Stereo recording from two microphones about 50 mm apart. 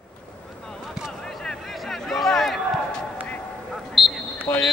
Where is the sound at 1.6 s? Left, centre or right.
Centre.